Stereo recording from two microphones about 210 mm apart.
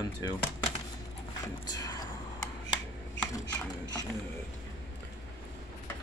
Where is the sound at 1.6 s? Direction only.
20° left (ahead or behind).